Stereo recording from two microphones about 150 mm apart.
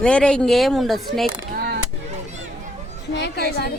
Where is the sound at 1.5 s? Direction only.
90° right.